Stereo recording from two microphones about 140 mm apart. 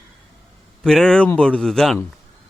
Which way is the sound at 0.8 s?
5° left (ahead or behind).